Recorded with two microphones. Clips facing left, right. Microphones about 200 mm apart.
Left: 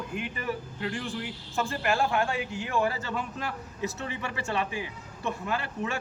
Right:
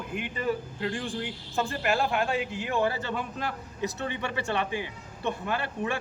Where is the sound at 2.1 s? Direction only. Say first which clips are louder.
Right 1 dB; 25° right (ahead or behind).